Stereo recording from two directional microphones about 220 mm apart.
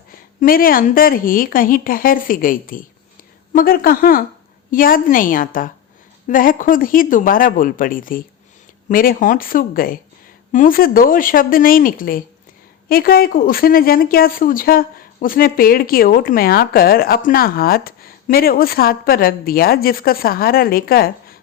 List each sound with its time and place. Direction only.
0.3 s a woman's voice: 40° left (ahead or behind)